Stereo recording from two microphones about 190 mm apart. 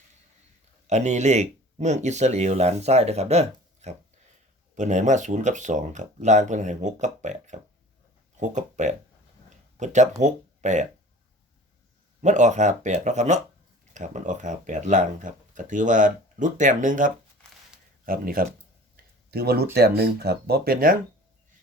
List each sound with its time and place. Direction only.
0.9 s speech: 35° right (ahead or behind)
12.2 s speech: 40° right (ahead or behind)